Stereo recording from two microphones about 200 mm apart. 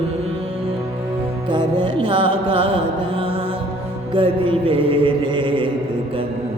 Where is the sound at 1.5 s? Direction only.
25° right (ahead or behind).